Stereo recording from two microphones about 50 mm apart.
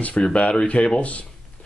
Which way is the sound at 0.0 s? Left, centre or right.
Left.